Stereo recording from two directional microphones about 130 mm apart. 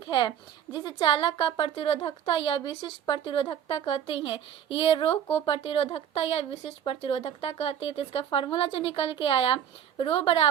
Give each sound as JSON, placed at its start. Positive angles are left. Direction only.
{"t": 0.0, "sound": "a woman's voice", "side_deg": 35}